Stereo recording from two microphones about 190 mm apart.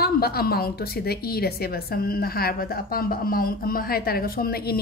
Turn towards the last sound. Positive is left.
turn(degrees=55)  # may be behind; listen again after turning